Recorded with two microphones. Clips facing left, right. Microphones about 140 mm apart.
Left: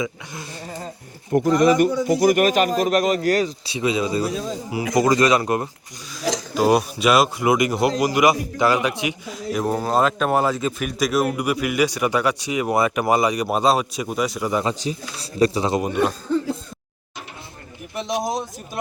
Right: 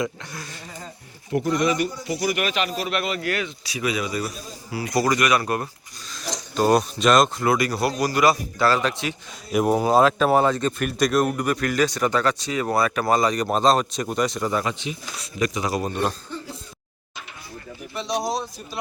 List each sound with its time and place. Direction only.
1.3 s a man's voice: 45° left (ahead or behind)
3.8 s a man's voice: 25° left (ahead or behind)
4.3 s speech: 90° left
4.7 s a man's voice: 20° left (ahead or behind)
6.5 s speech: 10° left (ahead or behind)
9.5 s speech: 10° right (ahead or behind)
14.5 s speech: 30° left (ahead or behind)